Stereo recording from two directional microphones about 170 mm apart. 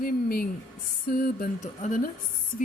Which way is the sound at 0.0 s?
60° left (ahead or behind).